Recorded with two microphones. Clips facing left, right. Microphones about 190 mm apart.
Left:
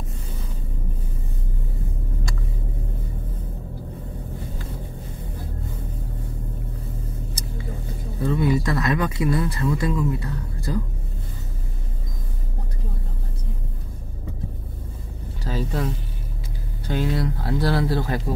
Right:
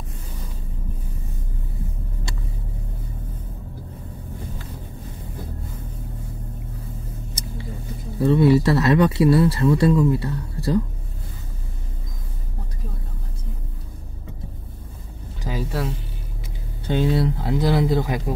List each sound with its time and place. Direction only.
8.3 s speech: 30° right (ahead or behind)
15.4 s a sound: 10° right (ahead or behind)
16.8 s speech: 25° right (ahead or behind)